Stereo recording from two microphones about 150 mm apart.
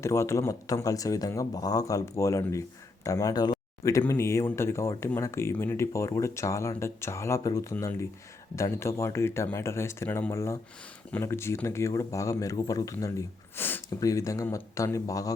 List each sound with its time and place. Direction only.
0.0 s speech: 20° left (ahead or behind)